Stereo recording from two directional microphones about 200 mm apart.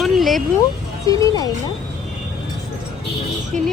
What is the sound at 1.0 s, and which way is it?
Speech, 15° left (ahead or behind).